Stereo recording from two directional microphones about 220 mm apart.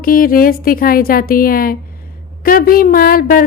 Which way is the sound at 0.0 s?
40° left (ahead or behind).